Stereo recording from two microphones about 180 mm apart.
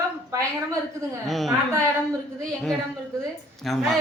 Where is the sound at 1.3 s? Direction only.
Centre (ahead or behind).